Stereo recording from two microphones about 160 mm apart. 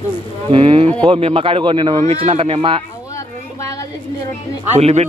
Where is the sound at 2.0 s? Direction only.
40° right (ahead or behind).